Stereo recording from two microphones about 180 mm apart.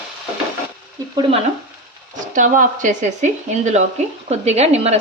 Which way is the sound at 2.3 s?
45° right (ahead or behind).